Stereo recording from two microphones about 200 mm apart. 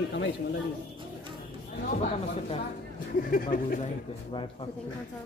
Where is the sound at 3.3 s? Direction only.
45° left (ahead or behind).